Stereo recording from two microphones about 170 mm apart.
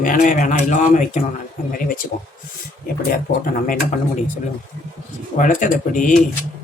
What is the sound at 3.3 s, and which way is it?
Speech, 55° left (ahead or behind).